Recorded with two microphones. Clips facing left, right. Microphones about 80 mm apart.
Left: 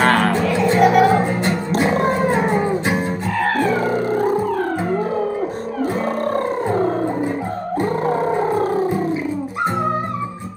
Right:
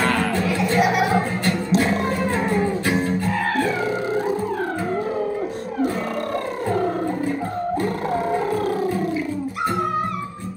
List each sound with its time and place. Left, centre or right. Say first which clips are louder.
0.0 s music: left 6 dB; left
0.7 s music: left 6 dB; centre
2.0 s music: left 5 dB; left
3.6 s music: left 4 dB; left
7.8 s music: left 4 dB; left